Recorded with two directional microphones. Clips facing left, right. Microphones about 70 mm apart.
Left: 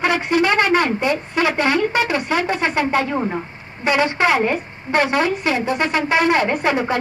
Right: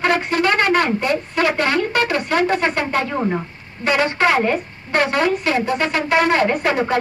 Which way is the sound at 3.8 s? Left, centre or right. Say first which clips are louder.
Even; centre.